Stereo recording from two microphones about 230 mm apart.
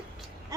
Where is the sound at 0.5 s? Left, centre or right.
Centre.